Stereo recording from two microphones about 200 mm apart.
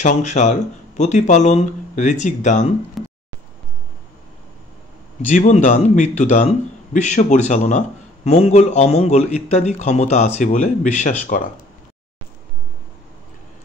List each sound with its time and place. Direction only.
0.0 s a man's voice: 35° left (ahead or behind)
3.0 s a sound: centre (ahead or behind)
5.3 s a man's voice: 35° left (ahead or behind)